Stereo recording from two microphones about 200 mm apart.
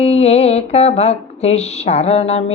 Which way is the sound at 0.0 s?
30° left (ahead or behind).